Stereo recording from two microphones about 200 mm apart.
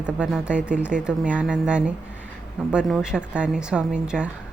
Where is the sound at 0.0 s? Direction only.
5° right (ahead or behind).